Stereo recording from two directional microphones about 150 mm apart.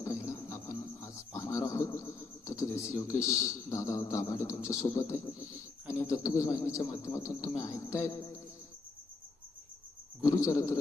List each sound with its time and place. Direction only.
0.0 s a sound: 20° left (ahead or behind)
6.0 s a man's voice: 20° left (ahead or behind)
10.2 s a man's voice: 20° left (ahead or behind)